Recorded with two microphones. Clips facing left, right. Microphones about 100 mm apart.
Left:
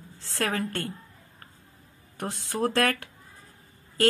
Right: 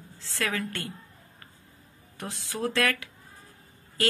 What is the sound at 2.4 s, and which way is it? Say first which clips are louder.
Speech: left 3 dB; 45° left (ahead or behind).